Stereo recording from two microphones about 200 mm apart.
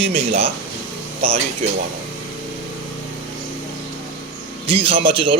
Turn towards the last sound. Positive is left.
turn(degrees=-25)  # may be behind; listen again after turning